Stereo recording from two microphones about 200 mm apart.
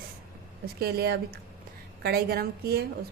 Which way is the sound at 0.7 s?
50° right (ahead or behind).